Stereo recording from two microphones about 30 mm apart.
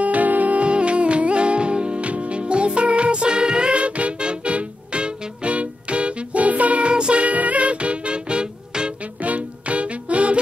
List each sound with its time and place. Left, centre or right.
0.0 s music: right
0.6 s music: right
2.0 s music: right
3.8 s music: right
4.2 s music: right
6.9 s music: right
7.2 s music: right
9.0 s music: right